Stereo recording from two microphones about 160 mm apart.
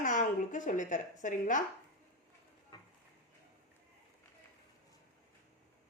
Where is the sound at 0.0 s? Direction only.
55° left (ahead or behind).